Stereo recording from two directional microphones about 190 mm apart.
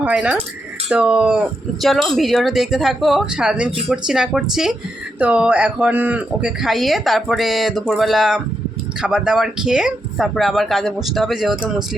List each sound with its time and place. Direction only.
0.0 s speech: 5° right (ahead or behind)